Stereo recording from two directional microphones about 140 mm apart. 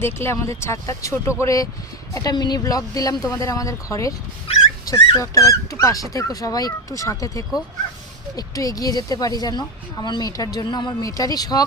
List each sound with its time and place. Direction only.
0.0 s a woman's voice: 20° left (ahead or behind)